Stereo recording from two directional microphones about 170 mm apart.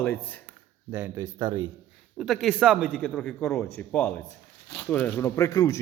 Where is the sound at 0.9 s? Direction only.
15° right (ahead or behind).